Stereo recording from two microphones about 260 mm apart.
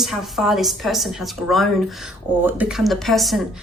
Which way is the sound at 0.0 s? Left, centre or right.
Centre.